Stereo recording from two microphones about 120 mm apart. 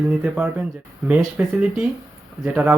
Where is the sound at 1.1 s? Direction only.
20° right (ahead or behind).